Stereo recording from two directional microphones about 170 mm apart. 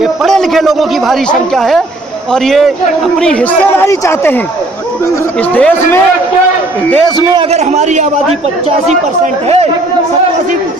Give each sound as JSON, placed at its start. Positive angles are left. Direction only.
{"t": 0.0, "sound": "a man's voice", "side_deg": 0}
{"t": 5.4, "sound": "speech", "side_deg": 10}
{"t": 7.5, "sound": "a man's voice", "side_deg": -40}